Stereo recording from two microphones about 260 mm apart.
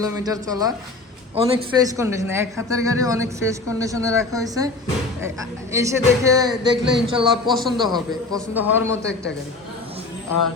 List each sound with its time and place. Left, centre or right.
0.0 s a man's voice: centre
5.7 s a man's voice: centre
7.6 s a man's voice: centre
7.9 s a man's voice: centre